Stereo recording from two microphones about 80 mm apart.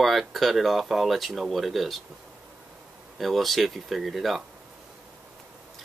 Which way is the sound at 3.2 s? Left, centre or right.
Centre.